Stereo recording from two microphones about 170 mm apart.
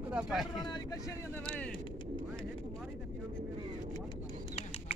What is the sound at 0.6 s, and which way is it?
Speech, 20° left (ahead or behind).